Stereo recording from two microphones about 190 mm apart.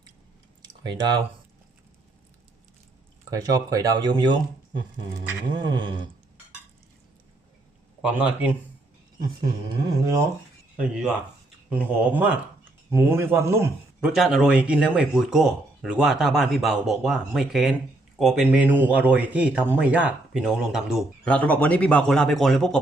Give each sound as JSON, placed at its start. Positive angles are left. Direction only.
{"t": 0.8, "sound": "speech", "side_deg": -25}
{"t": 3.2, "sound": "speech", "side_deg": -20}
{"t": 8.0, "sound": "speech", "side_deg": -5}
{"t": 9.1, "sound": "speech", "side_deg": -20}
{"t": 10.8, "sound": "a man's voice", "side_deg": -5}
{"t": 14.2, "sound": "speech", "side_deg": 0}
{"t": 21.2, "sound": "speech", "side_deg": 5}